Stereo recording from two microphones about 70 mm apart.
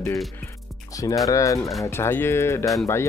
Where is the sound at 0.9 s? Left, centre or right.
Left.